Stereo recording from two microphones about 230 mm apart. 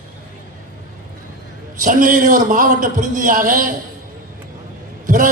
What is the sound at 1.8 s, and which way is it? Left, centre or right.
A man's voice, right.